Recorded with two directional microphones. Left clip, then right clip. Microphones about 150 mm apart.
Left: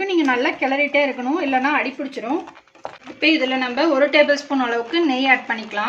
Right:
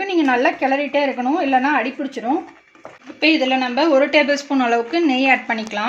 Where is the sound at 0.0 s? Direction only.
35° right (ahead or behind).